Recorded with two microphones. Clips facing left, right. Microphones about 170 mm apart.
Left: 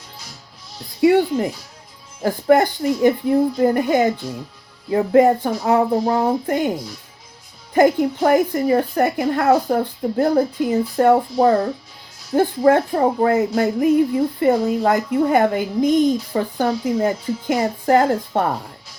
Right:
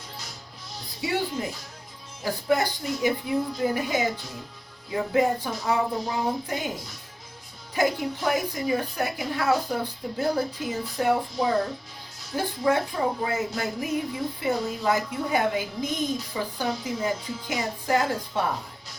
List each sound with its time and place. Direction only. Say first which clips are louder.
1.0 s speech: left 13 dB; 60° left (ahead or behind)
7.7 s speech: left 10 dB; 55° left (ahead or behind)